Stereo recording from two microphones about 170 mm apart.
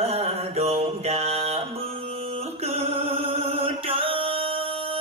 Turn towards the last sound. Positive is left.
turn(degrees=-35)  # may be behind; listen again after turning